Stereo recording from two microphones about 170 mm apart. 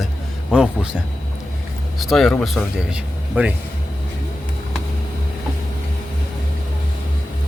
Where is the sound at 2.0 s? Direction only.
Centre (ahead or behind).